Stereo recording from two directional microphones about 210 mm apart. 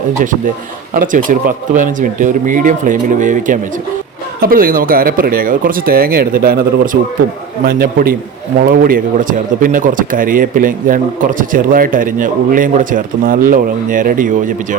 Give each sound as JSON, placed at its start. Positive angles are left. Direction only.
{"t": 0.9, "sound": "a man's voice", "side_deg": -40}